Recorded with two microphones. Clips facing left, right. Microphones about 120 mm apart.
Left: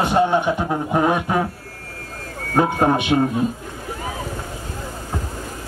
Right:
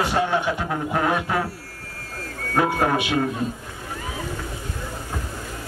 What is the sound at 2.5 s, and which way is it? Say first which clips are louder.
Speech: left 3 dB; 25° left (ahead or behind).